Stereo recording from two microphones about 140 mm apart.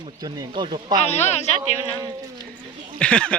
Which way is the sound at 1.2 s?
55° left (ahead or behind).